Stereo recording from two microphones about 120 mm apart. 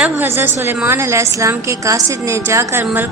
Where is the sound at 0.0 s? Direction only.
15° right (ahead or behind).